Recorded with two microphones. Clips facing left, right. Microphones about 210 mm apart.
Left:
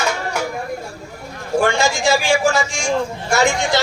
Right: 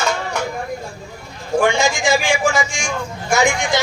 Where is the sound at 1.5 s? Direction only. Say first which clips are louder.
Right 1 dB; 15° right (ahead or behind).